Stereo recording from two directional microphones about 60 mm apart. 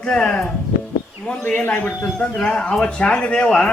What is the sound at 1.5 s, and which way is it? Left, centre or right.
Speech, left.